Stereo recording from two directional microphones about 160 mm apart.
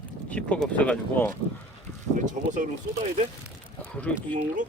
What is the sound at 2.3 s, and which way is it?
Speech, 55° right (ahead or behind).